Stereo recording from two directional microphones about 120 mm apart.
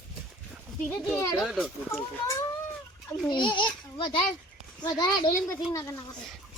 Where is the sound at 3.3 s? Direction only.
40° left (ahead or behind).